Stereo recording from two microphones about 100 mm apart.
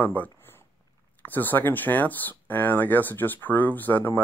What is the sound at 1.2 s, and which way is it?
Speech, 20° left (ahead or behind).